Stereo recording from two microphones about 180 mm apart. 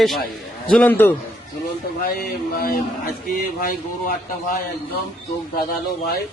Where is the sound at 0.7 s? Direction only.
10° left (ahead or behind).